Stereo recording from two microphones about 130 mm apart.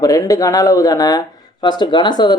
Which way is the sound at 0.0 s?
25° left (ahead or behind).